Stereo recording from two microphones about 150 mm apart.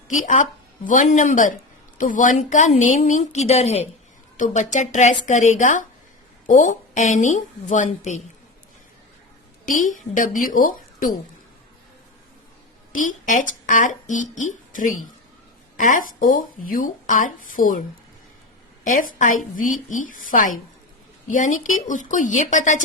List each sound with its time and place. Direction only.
0.1 s a woman's voice: 55° left (ahead or behind)
4.4 s a woman's voice: 55° left (ahead or behind)
9.6 s a woman's voice: 60° left (ahead or behind)
12.9 s a woman's voice: 60° left (ahead or behind)
18.9 s a woman's voice: 60° left (ahead or behind)